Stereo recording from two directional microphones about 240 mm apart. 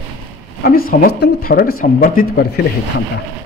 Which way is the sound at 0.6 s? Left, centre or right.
Left.